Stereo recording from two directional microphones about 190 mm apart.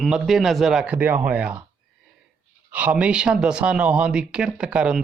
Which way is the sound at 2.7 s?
10° right (ahead or behind).